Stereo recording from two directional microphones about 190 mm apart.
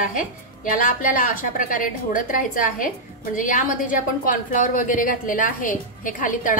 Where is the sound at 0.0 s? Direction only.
45° left (ahead or behind).